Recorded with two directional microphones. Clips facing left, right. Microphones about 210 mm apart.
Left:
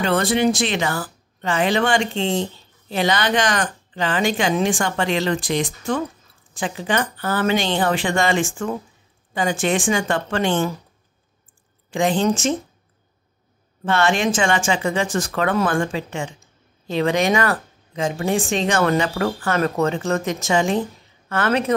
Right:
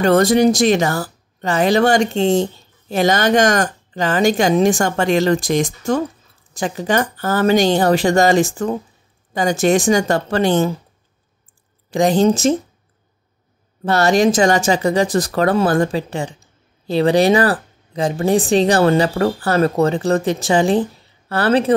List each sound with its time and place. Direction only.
0.0 s a woman's voice: 45° right (ahead or behind)
11.9 s speech: 40° right (ahead or behind)
13.8 s speech: 40° right (ahead or behind)